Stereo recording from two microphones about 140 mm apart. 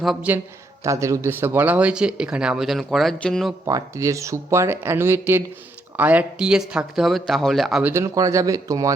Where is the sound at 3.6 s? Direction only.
25° right (ahead or behind); by 7.8 s centre (ahead or behind).